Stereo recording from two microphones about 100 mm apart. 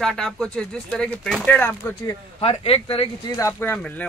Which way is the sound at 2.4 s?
70° left (ahead or behind).